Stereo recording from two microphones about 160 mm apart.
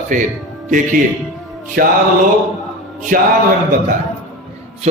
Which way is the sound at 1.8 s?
65° right (ahead or behind).